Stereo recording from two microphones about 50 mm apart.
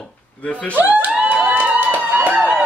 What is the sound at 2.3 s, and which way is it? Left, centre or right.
Music, right.